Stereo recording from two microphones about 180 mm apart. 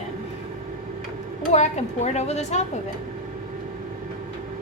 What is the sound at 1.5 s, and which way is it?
A woman's voice, 40° left (ahead or behind).